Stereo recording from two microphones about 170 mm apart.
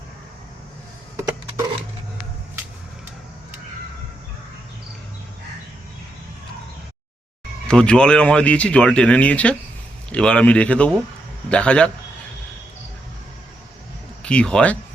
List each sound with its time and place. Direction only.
7.7 s speech: 5° left (ahead or behind)
14.2 s speech: 5° left (ahead or behind)